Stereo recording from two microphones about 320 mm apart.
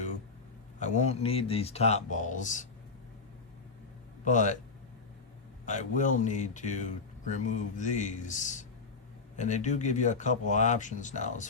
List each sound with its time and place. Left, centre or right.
0.8 s speech: left
4.3 s speech: left
5.6 s speech: left